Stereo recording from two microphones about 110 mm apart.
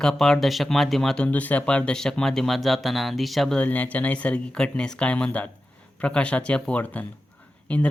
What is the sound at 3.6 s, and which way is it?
Speech, 15° left (ahead or behind).